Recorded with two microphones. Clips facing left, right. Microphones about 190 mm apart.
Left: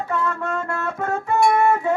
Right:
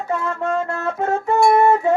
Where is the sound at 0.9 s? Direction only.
25° right (ahead or behind).